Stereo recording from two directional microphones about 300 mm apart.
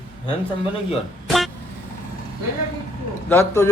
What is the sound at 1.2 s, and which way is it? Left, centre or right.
Vehicle, centre.